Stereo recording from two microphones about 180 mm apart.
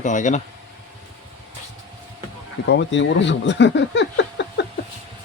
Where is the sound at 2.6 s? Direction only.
85° left.